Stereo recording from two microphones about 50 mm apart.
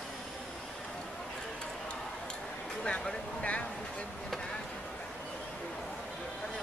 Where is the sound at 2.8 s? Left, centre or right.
Centre.